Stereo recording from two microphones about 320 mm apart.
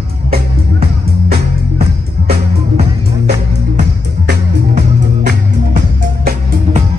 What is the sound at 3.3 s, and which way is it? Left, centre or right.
Music, right.